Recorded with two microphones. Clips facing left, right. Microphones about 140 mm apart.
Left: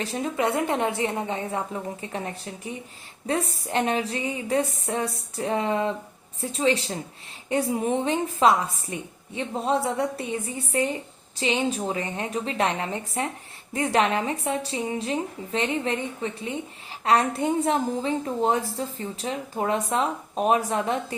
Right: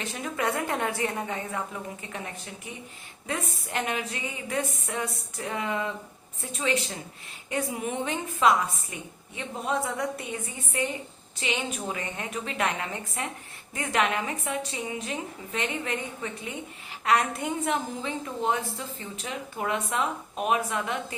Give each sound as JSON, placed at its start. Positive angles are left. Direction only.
{"t": 0.0, "sound": "a woman's voice", "side_deg": 30}